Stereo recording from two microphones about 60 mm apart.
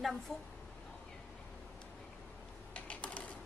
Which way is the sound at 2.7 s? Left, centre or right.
Left.